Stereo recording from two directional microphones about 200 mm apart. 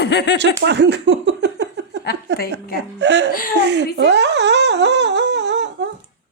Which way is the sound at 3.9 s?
60° right (ahead or behind).